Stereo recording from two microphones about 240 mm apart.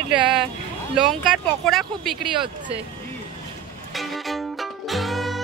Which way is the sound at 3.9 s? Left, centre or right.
Centre.